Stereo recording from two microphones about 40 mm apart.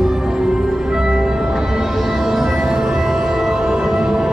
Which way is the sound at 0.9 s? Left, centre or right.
Centre.